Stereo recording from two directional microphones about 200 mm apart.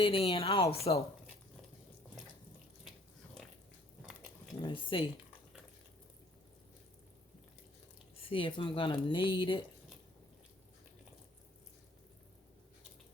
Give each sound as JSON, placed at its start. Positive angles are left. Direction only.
{"t": 0.0, "sound": "speech", "side_deg": 30}
{"t": 4.6, "sound": "speech", "side_deg": 25}
{"t": 8.1, "sound": "speech", "side_deg": 25}